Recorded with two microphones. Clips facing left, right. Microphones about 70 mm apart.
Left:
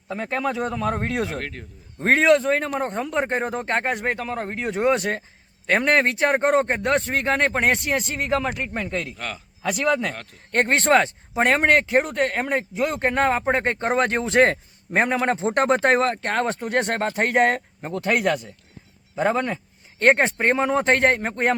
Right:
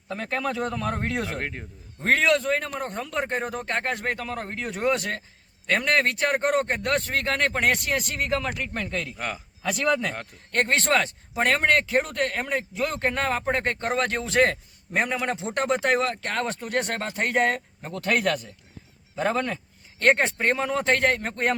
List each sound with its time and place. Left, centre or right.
0.1 s speech: centre
1.4 s speech: right
2.0 s speech: left
9.1 s a man's voice: centre
9.6 s speech: left